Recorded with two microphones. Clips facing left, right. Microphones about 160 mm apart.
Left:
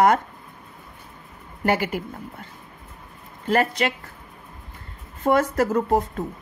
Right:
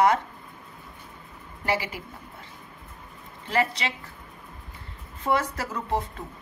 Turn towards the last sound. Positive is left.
turn(degrees=45)  # may be behind; listen again after turning